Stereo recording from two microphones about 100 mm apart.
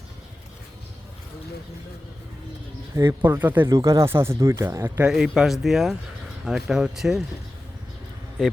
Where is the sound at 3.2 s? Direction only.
20° right (ahead or behind).